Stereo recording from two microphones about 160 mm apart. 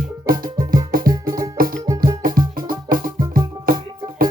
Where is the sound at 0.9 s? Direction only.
60° right (ahead or behind).